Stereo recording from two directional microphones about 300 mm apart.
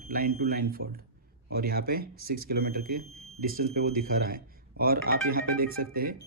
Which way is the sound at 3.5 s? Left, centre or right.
Right.